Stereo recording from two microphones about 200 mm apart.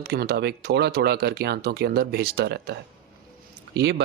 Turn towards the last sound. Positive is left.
turn(degrees=-55)  # may be behind; listen again after turning